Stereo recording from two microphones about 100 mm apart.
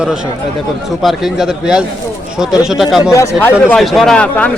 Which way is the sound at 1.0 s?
5° right (ahead or behind).